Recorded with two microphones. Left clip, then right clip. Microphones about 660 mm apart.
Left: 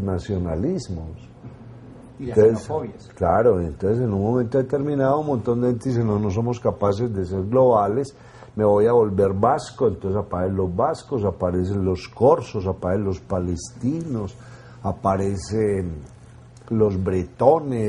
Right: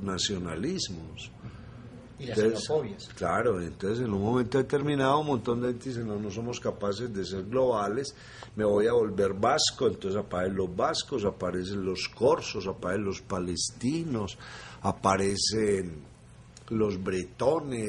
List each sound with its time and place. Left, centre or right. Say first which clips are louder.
0.0 s speech: left 4 dB; left
3.2 s a man's voice: left 10 dB; left
5.9 s a man's voice: left 11 dB; left
14.8 s a man's voice: left 4 dB; centre; by 17.8 s left